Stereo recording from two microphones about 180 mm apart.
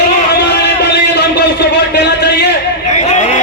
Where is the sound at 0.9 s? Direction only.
65° left (ahead or behind).